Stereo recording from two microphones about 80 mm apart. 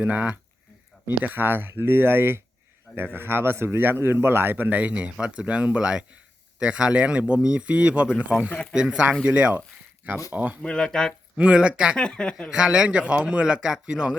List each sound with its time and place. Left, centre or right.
0.0 s speech: centre
8.6 s speech: centre
10.6 s speech: centre
11.3 s speech: centre
11.9 s speech: centre
12.5 s speech: centre